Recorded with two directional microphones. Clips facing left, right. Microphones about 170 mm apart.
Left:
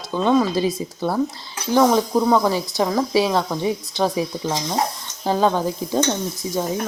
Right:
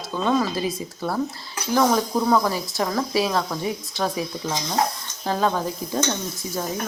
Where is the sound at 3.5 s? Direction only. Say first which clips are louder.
Left 4 dB; 25° left (ahead or behind).